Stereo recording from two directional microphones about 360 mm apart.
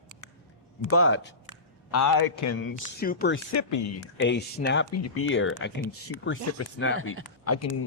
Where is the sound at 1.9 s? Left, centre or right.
Left.